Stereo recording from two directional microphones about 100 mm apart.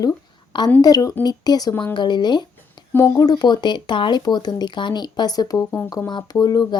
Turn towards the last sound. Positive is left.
turn(degrees=40)  # may be behind; listen again after turning